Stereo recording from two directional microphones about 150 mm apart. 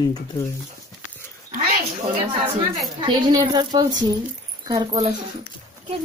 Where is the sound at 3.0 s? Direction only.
30° right (ahead or behind).